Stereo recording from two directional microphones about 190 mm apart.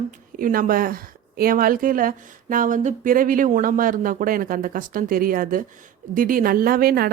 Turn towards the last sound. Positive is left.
turn(degrees=-50)  # may be behind; listen again after turning